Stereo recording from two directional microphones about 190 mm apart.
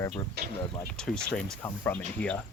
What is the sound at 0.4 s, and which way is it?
Speech, 60° right (ahead or behind).